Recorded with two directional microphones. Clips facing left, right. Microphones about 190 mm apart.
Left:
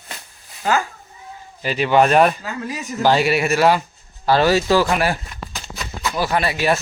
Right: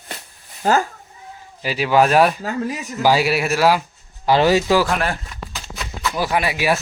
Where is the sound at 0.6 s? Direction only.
40° right (ahead or behind).